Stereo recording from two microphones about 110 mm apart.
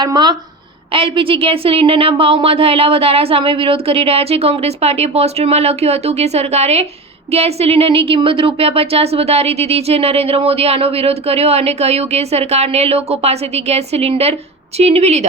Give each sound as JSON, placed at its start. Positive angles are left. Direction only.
{"t": 0.0, "sound": "speech", "side_deg": -40}
{"t": 0.9, "sound": "speech", "side_deg": -55}
{"t": 7.3, "sound": "speech", "side_deg": -70}